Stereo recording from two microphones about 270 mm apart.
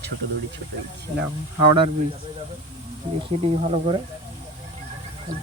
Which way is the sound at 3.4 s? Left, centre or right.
Right.